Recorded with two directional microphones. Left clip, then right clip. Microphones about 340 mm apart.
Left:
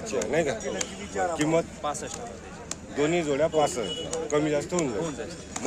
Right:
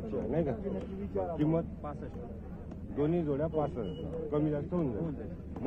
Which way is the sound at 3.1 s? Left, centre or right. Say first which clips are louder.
Left 10 dB; centre.